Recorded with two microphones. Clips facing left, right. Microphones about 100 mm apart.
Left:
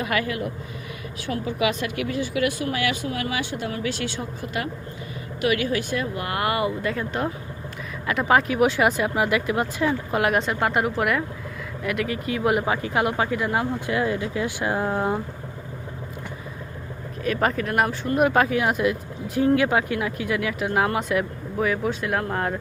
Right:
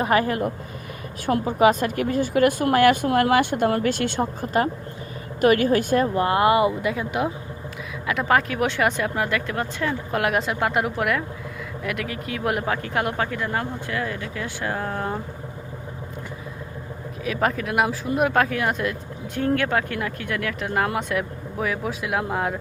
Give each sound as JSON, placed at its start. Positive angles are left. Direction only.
{"t": 0.0, "sound": "speech", "side_deg": -40}
{"t": 6.9, "sound": "speech", "side_deg": -10}
{"t": 8.0, "sound": "speech", "side_deg": 0}
{"t": 17.2, "sound": "speech", "side_deg": 0}